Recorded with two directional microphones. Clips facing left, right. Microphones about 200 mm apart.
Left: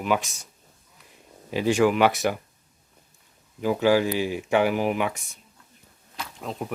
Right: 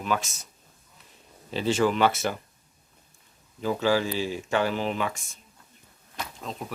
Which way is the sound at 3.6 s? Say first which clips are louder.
Left 4 dB; 15° left (ahead or behind).